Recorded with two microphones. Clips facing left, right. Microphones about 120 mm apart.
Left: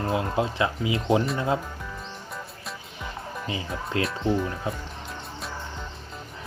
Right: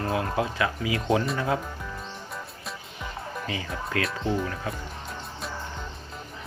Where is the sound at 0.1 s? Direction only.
25° left (ahead or behind).